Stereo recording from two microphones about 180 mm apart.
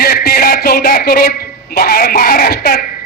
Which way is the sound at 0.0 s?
55° left (ahead or behind).